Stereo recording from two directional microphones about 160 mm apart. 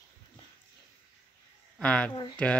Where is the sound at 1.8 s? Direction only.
5° left (ahead or behind).